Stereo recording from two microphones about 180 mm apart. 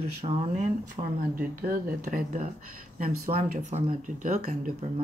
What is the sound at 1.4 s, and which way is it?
Speech, 50° right (ahead or behind).